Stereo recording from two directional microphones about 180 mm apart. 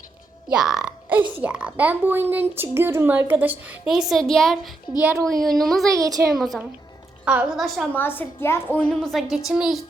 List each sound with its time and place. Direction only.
0.5 s a woman's voice: 5° right (ahead or behind)
5.9 s a woman's voice: 20° right (ahead or behind)
6.4 s a woman's voice: centre (ahead or behind)
7.9 s a woman's voice: 10° left (ahead or behind)